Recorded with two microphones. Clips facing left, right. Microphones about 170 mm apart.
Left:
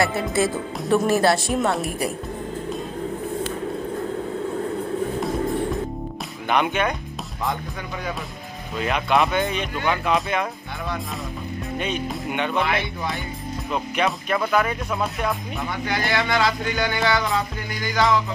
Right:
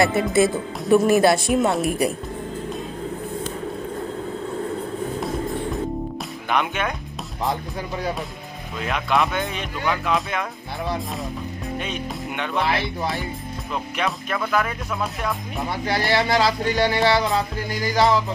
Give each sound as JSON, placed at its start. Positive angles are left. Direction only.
{"t": 0.0, "sound": "speech", "side_deg": -20}
{"t": 6.5, "sound": "speech", "side_deg": 0}
{"t": 8.7, "sound": "speech", "side_deg": 0}
{"t": 11.8, "sound": "speech", "side_deg": 0}
{"t": 12.6, "sound": "speech", "side_deg": -35}
{"t": 13.9, "sound": "speech", "side_deg": 0}
{"t": 15.7, "sound": "speech", "side_deg": -35}